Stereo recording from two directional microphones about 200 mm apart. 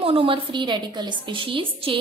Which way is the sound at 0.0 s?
30° right (ahead or behind).